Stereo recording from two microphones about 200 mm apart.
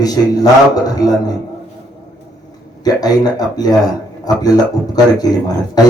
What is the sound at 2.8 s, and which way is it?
Speech, 20° left (ahead or behind).